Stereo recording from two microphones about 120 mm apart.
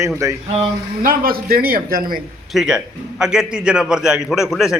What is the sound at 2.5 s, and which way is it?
A man's voice, 5° right (ahead or behind).